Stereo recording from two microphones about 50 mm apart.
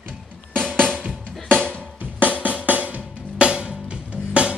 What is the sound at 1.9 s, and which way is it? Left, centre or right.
Drum, right.